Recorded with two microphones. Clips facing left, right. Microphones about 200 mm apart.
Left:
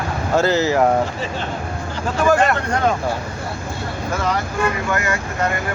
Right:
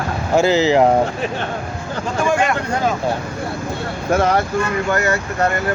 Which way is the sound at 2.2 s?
Centre (ahead or behind).